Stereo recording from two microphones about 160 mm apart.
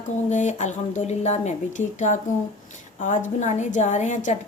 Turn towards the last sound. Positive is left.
turn(degrees=50)  # may be behind; listen again after turning